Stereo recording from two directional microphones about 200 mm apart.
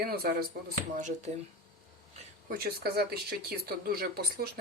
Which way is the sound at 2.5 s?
50° right (ahead or behind).